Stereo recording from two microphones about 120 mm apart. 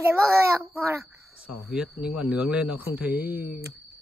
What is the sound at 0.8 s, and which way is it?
Speech, 25° right (ahead or behind).